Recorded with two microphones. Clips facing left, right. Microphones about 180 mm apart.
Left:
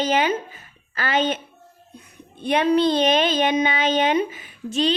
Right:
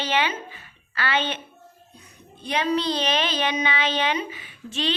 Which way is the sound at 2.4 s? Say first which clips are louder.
Left 6 dB; 55° left (ahead or behind).